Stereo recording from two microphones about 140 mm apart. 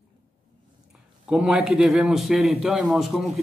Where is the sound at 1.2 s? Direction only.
5° right (ahead or behind).